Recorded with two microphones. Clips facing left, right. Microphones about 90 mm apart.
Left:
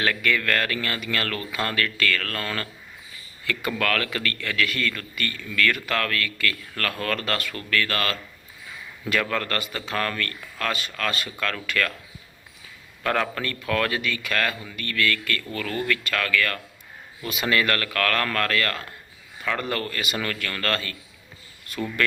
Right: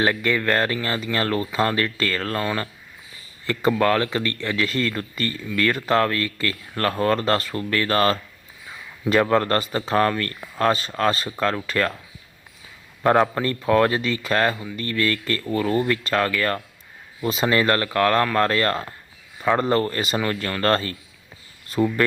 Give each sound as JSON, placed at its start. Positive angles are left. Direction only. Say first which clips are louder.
{"t": 0.0, "sound": "speech", "louder": "right 3 dB", "side_deg": -25}
{"t": 13.0, "sound": "speech", "louder": "right 7 dB", "side_deg": -25}